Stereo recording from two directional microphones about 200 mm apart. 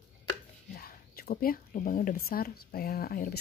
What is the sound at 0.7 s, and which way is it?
Speech, 50° left (ahead or behind).